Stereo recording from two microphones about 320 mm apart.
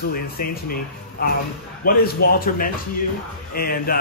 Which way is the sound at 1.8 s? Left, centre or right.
Left.